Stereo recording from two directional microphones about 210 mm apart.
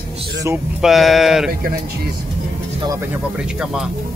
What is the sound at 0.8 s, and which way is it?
Speech, centre (ahead or behind).